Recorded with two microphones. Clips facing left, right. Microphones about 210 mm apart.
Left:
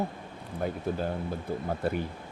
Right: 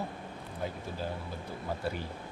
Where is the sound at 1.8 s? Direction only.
55° left (ahead or behind).